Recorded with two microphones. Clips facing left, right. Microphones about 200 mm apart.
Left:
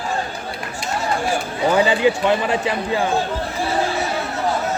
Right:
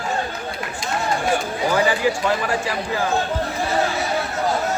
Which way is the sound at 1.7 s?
25° left (ahead or behind).